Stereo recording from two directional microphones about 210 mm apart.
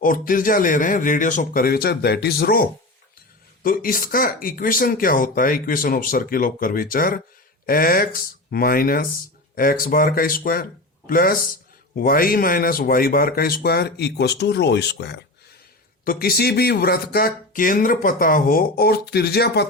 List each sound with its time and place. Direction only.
0.0 s speech: 40° left (ahead or behind)